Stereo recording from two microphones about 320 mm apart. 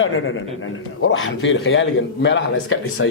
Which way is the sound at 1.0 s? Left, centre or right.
Left.